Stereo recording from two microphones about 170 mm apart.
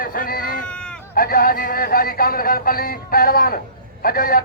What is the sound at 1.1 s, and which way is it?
Speech, 60° left (ahead or behind).